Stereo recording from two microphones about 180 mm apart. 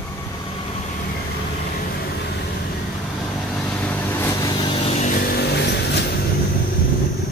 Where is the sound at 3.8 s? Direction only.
10° left (ahead or behind).